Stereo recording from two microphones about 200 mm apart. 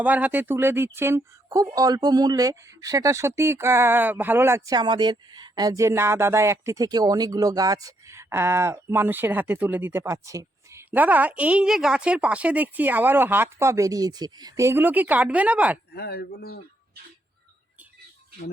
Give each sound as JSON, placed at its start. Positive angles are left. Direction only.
{"t": 0.0, "sound": "speech", "side_deg": -10}
{"t": 15.9, "sound": "speech", "side_deg": 55}